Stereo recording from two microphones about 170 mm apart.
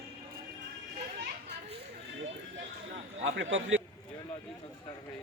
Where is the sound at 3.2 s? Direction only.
90° right.